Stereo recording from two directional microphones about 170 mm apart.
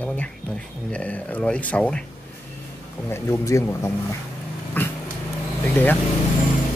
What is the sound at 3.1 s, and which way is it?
Speech, 15° left (ahead or behind).